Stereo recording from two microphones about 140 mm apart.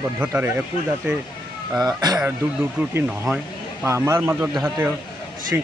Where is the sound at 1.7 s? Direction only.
30° right (ahead or behind).